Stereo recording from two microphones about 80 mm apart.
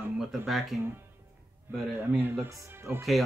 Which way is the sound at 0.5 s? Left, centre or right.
Centre.